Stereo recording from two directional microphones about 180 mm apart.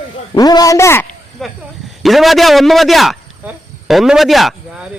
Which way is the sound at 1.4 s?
Centre (ahead or behind).